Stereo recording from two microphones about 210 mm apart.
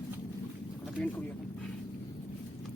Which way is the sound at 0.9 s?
5° left (ahead or behind).